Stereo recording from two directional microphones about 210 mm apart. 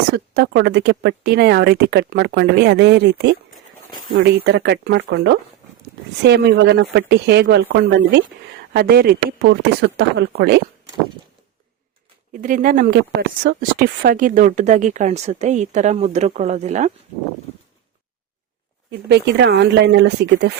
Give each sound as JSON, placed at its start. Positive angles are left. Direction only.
{"t": 0.1, "sound": "speech", "side_deg": -55}
{"t": 12.3, "sound": "speech", "side_deg": -40}
{"t": 18.9, "sound": "speech", "side_deg": -55}